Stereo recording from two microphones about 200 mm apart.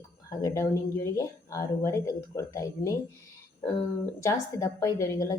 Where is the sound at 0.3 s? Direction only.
15° left (ahead or behind).